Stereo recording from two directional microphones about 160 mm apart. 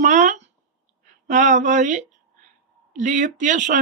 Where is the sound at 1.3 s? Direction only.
50° right (ahead or behind).